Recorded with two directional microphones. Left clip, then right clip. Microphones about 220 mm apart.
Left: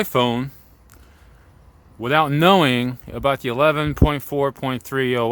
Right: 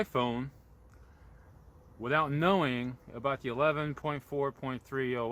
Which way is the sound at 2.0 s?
50° left (ahead or behind).